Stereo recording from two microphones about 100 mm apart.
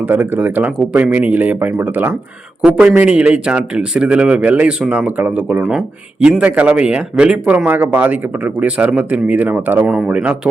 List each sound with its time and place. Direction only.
0.1 s speech: 20° right (ahead or behind)
5.6 s speech: 5° right (ahead or behind)
9.8 s speech: 5° right (ahead or behind)